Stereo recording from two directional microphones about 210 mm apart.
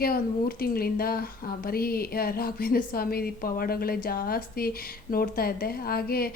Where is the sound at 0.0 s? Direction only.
45° left (ahead or behind).